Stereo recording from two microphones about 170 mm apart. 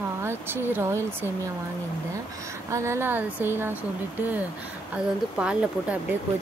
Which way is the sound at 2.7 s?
15° right (ahead or behind).